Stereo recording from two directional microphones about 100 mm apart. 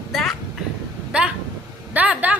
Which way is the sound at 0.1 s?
Centre (ahead or behind).